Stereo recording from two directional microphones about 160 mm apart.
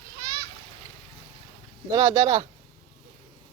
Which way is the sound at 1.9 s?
20° right (ahead or behind).